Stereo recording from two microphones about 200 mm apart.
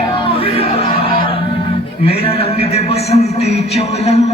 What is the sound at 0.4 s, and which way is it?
Music, 30° left (ahead or behind).